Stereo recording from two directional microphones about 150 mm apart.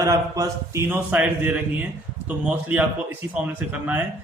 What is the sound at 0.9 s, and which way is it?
A man's voice, 10° right (ahead or behind).